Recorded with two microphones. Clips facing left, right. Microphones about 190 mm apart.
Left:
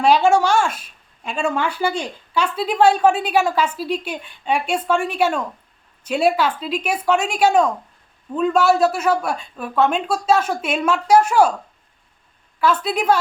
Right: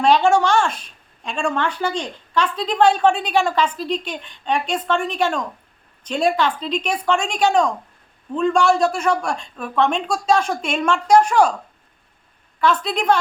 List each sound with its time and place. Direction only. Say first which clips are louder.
0.0 s a woman's voice: even; 5° left (ahead or behind)
12.5 s a woman's voice: left 1 dB; 5° left (ahead or behind)